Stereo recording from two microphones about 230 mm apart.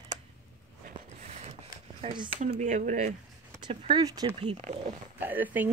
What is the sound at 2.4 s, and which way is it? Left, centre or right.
Speech, right.